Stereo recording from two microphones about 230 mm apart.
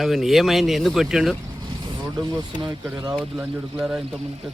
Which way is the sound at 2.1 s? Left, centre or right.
Centre.